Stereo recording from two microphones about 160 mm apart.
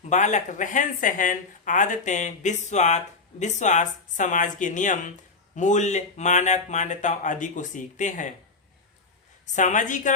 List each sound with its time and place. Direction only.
0.1 s speech: 50° left (ahead or behind)
9.6 s speech: 50° left (ahead or behind)